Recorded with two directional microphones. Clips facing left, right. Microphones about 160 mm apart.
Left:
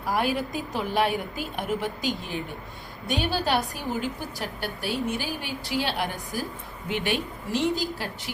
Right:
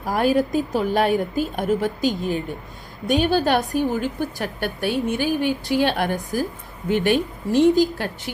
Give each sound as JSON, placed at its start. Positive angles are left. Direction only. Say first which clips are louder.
{"t": 0.1, "sound": "a woman's voice", "louder": "right 7 dB", "side_deg": -45}